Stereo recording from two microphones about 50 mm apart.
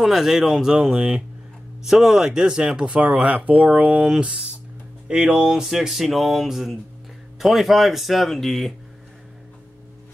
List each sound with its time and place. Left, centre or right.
0.0 s speech: centre